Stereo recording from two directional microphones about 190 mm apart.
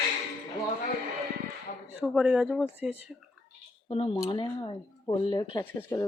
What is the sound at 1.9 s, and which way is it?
A woman's voice, 5° right (ahead or behind).